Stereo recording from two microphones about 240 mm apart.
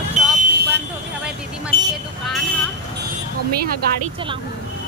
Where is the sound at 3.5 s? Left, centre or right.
Right.